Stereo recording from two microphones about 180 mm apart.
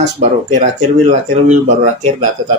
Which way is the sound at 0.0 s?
40° right (ahead or behind).